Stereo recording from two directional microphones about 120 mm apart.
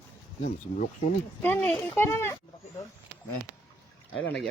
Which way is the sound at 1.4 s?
15° left (ahead or behind).